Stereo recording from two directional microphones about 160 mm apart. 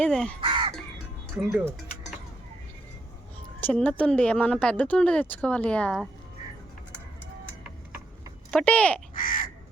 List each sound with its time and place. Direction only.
0.0 s a woman's voice: 5° left (ahead or behind)
0.4 s crow: 30° right (ahead or behind)
1.4 s speech: 10° right (ahead or behind)
3.6 s a woman's voice: 10° left (ahead or behind)
8.4 s a woman's voice: 5° left (ahead or behind)
9.1 s crow: 60° left (ahead or behind)